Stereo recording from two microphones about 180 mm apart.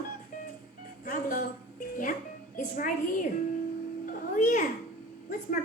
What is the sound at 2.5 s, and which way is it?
Speech, 45° left (ahead or behind).